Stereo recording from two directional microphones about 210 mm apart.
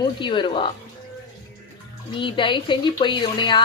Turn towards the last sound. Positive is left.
turn(degrees=20)  # may be behind; listen again after turning